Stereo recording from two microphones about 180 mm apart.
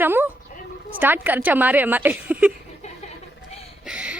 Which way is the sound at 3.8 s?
5° right (ahead or behind).